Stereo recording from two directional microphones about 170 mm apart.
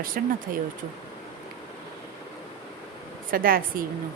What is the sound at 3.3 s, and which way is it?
Speech, 55° right (ahead or behind).